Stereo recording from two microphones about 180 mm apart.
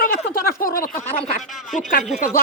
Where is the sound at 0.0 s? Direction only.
55° left (ahead or behind).